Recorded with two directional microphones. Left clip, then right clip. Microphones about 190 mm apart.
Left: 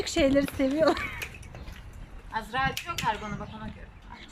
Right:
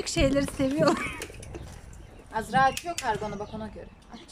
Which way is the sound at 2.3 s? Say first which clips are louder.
Right 5 dB; 60° right (ahead or behind).